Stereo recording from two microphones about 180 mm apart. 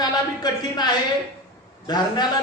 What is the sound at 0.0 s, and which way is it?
A man's voice, 20° left (ahead or behind).